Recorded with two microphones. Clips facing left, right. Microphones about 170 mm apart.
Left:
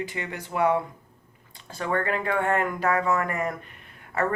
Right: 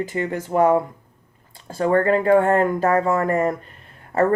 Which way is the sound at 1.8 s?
40° right (ahead or behind).